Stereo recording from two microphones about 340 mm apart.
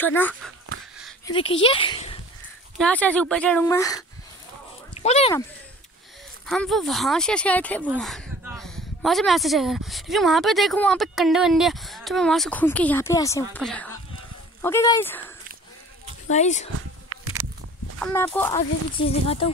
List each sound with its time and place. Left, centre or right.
0.0 s speech: centre
2.8 s speech: centre
6.4 s speech: centre
16.3 s speech: left
17.9 s speech: centre